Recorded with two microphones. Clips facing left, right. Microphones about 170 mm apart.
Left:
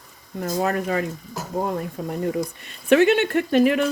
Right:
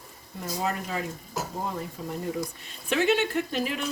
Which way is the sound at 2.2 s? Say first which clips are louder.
Left 8 dB; 60° left (ahead or behind).